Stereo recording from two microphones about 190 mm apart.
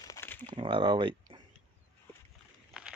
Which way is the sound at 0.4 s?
25° right (ahead or behind).